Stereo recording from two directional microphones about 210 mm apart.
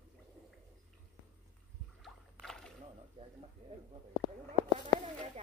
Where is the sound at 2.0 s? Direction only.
Centre (ahead or behind).